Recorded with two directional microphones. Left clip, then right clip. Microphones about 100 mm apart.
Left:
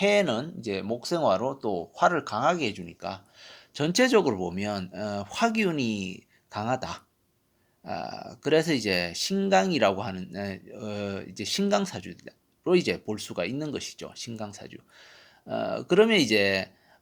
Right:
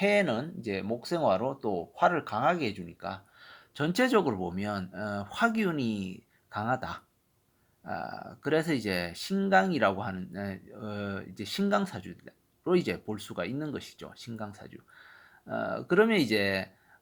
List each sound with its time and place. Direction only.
0.0 s speech: 20° left (ahead or behind)